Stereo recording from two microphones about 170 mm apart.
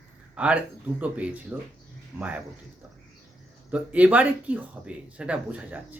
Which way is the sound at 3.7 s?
10° right (ahead or behind).